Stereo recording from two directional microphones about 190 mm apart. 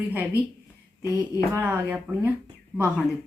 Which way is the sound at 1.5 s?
10° right (ahead or behind).